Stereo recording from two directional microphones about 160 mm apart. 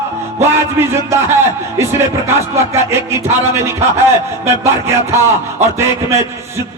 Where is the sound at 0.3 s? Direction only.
15° right (ahead or behind).